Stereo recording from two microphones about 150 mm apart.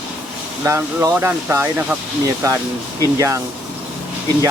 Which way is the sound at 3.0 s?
20° right (ahead or behind).